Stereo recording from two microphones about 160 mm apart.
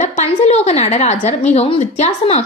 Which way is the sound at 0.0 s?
45° left (ahead or behind).